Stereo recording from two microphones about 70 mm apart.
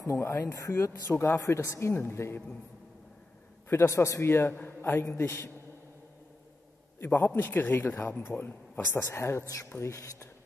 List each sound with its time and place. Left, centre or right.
0.0 s a man's voice: left
3.6 s a man's voice: left
7.0 s a man's voice: left